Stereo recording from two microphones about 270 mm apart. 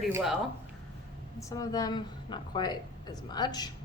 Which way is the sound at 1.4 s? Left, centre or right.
Centre.